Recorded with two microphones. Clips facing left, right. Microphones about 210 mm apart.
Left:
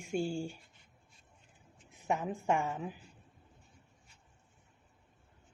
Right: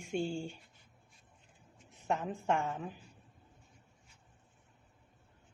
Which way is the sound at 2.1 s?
10° left (ahead or behind).